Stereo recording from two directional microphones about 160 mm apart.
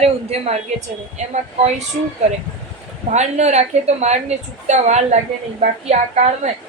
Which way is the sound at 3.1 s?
45° right (ahead or behind).